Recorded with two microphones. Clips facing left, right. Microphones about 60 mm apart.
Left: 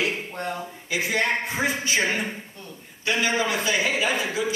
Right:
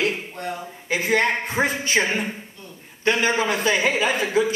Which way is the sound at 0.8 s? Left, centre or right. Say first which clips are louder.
Right 4 dB; right.